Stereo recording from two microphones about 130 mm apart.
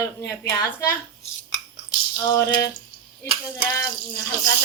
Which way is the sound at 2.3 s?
30° left (ahead or behind).